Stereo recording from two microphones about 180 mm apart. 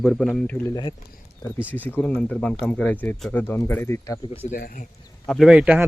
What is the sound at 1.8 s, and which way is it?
Speech, 10° left (ahead or behind).